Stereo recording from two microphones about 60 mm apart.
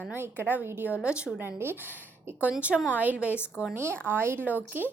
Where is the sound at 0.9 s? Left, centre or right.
Centre.